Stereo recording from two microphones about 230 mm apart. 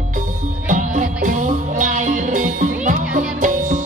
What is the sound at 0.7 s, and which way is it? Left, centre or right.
Music, right.